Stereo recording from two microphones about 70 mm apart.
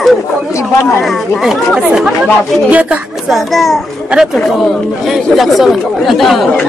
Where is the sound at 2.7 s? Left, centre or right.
Right.